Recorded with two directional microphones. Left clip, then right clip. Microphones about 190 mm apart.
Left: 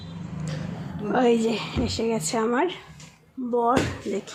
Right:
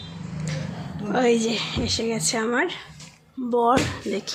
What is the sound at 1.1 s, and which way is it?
A woman's voice, 5° left (ahead or behind).